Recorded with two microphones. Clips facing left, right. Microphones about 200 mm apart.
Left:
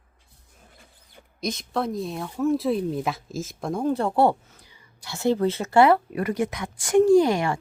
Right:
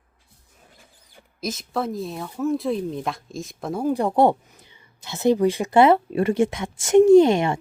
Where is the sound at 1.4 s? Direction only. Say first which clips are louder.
Even; 5° right (ahead or behind); by 7.5 s 25° right (ahead or behind).